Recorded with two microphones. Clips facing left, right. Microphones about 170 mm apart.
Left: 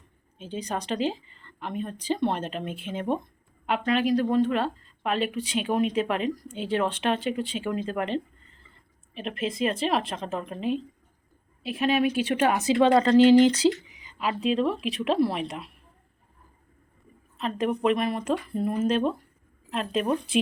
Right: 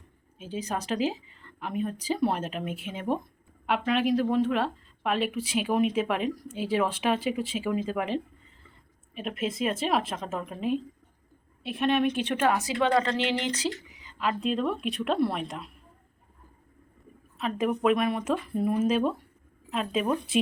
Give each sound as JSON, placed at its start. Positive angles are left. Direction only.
{"t": 0.3, "sound": "speech", "side_deg": -5}
{"t": 12.4, "sound": "speech", "side_deg": 15}
{"t": 12.8, "sound": "speech", "side_deg": 30}
{"t": 14.0, "sound": "speech", "side_deg": 10}
{"t": 17.3, "sound": "speech", "side_deg": 0}